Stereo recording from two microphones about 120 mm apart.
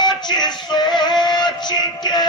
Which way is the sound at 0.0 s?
35° left (ahead or behind).